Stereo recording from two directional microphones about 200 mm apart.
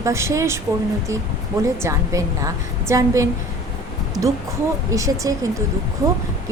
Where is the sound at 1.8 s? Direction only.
15° right (ahead or behind).